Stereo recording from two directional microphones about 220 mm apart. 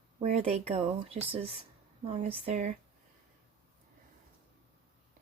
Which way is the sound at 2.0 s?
25° right (ahead or behind).